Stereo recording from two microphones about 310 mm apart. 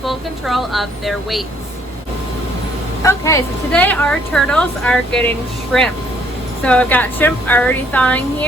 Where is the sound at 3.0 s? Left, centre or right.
Centre.